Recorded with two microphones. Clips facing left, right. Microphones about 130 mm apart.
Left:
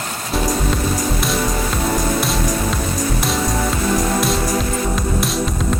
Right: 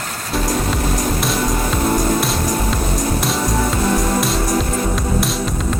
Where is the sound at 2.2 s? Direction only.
Centre (ahead or behind).